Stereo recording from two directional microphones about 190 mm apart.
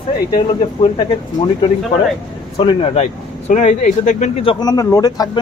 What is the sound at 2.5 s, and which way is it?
Speech, 25° left (ahead or behind).